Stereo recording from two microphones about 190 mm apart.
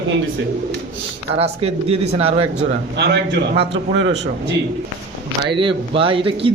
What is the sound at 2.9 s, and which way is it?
Speech, 60° right (ahead or behind).